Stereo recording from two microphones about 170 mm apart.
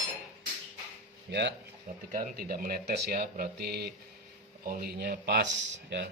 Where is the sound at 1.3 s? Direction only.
90° right.